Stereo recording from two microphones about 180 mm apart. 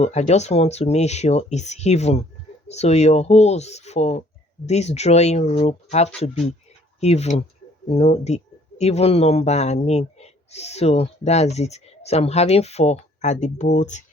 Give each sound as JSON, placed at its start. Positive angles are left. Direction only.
{"t": 0.0, "sound": "speech", "side_deg": 40}